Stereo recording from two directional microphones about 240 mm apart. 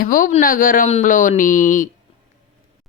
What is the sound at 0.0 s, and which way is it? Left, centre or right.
Speech, left.